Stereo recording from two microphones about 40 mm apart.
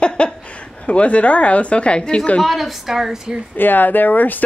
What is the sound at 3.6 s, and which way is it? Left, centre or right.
Speech, left.